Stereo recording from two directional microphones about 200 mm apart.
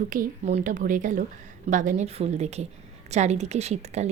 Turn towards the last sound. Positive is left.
turn(degrees=-35)  # may be behind; listen again after turning